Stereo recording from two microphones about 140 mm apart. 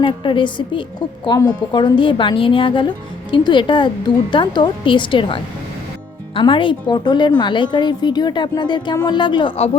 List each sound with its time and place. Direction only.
0.0 s a woman's voice: 35° left (ahead or behind)